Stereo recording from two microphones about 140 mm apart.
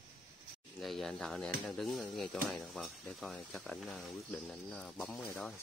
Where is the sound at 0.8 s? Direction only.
Centre (ahead or behind).